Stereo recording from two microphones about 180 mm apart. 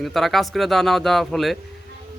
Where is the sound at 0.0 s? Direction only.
Centre (ahead or behind).